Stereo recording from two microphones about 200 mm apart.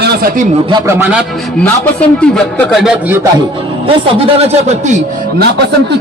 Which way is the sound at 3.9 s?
25° right (ahead or behind).